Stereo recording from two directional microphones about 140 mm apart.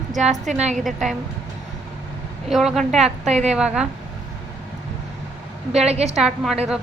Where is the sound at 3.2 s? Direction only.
55° right (ahead or behind).